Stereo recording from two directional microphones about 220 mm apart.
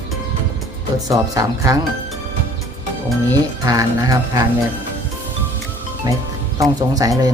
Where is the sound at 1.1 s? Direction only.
15° right (ahead or behind).